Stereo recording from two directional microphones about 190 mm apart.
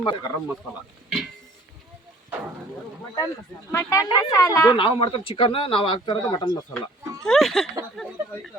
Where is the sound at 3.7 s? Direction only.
15° left (ahead or behind).